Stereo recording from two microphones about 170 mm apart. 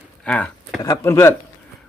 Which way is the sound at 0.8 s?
20° left (ahead or behind).